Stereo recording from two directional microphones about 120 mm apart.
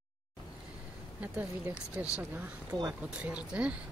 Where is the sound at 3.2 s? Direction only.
10° right (ahead or behind).